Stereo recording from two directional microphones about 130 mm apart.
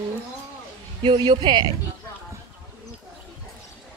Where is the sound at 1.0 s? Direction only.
35° right (ahead or behind).